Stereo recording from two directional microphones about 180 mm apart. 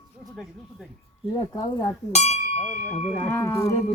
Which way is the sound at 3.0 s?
35° left (ahead or behind).